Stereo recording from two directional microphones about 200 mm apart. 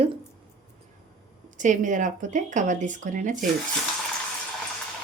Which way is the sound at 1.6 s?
40° right (ahead or behind).